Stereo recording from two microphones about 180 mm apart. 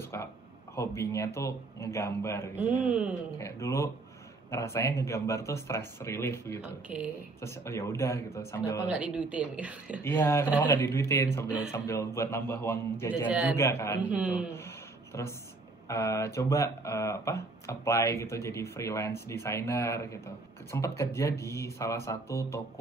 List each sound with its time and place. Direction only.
0.0 s a sound: 15° left (ahead or behind)
0.7 s speech: 15° left (ahead or behind)
2.8 s a woman's voice: 5° right (ahead or behind)
3.3 s speech: 15° left (ahead or behind)
8.8 s a woman's voice: 5° right (ahead or behind)
10.0 s speech: 15° left (ahead or behind)
11.4 s a man's voice: 5° right (ahead or behind)
11.7 s speech: 15° left (ahead or behind)
13.3 s a woman's voice: 5° right (ahead or behind)
13.6 s speech: 15° left (ahead or behind)
14.0 s a woman's voice: 5° right (ahead or behind)
15.1 s speech: 15° left (ahead or behind)